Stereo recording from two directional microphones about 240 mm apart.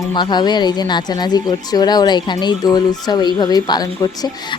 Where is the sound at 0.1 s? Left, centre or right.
Centre.